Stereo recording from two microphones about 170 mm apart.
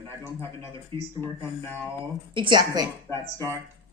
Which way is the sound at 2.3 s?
30° right (ahead or behind).